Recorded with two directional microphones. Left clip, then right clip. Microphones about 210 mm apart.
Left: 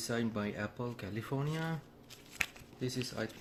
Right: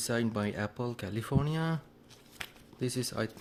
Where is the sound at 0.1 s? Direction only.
50° right (ahead or behind).